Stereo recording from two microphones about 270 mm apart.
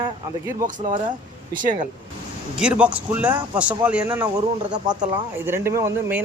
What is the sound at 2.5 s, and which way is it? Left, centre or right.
Speech, centre.